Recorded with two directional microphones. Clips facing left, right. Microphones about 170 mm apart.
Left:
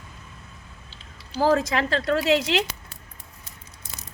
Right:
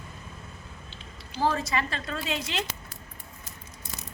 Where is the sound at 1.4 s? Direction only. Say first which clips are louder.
Left 6 dB; 90° left.